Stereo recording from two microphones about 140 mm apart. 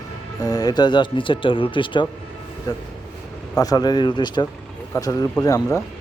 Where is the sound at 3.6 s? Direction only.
30° left (ahead or behind).